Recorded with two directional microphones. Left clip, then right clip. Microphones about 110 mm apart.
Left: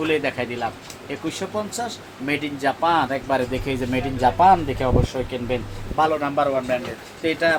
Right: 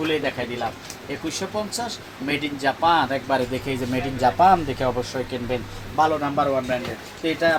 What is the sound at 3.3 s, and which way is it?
Speech, 35° right (ahead or behind).